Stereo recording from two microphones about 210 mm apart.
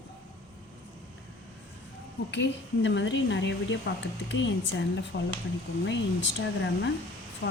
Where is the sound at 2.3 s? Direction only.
55° left (ahead or behind).